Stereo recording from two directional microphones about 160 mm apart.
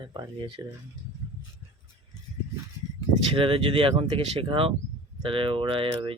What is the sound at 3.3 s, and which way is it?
Speech, 35° right (ahead or behind).